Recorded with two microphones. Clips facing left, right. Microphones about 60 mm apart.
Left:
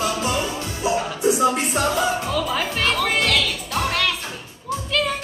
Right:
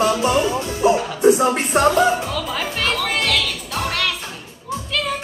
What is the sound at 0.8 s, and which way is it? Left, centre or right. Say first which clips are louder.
Speech: right 6 dB; right.